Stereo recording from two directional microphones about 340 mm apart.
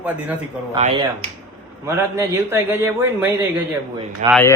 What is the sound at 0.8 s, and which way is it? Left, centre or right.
Speech, centre.